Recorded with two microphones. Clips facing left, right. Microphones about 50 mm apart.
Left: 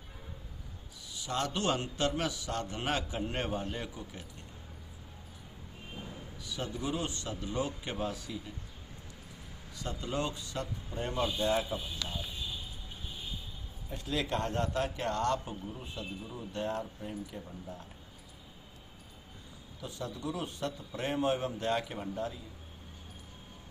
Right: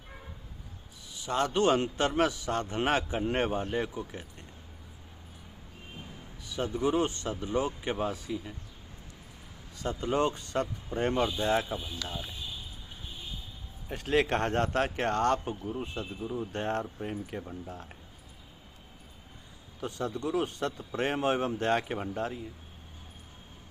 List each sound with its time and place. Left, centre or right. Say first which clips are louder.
1.1 s a man's voice: right 5 dB; right
6.4 s a man's voice: right 7 dB; right
9.7 s a man's voice: right 6 dB; right
13.9 s a man's voice: right 7 dB; right
19.8 s a man's voice: right 6 dB; right